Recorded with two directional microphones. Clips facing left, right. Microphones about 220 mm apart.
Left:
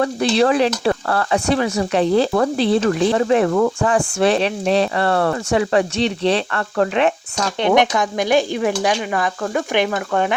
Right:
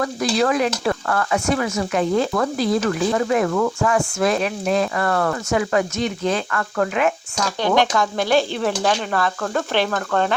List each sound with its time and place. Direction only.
0.0 s speech: 30° left (ahead or behind); by 10.3 s 10° left (ahead or behind)